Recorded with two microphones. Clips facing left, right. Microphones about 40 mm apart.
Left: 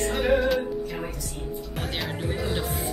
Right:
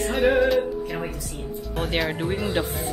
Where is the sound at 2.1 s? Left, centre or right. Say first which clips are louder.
Right 4 dB; right.